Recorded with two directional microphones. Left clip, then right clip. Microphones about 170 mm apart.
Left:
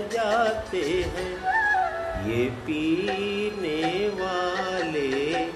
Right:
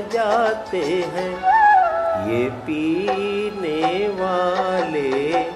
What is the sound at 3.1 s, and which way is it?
Music, 55° right (ahead or behind).